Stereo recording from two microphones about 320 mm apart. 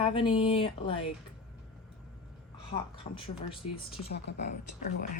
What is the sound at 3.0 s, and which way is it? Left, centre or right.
Speech, centre.